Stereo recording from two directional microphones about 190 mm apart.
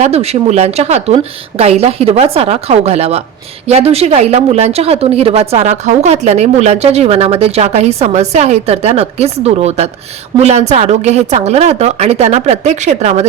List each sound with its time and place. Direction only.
0.0 s a woman's voice: 35° right (ahead or behind)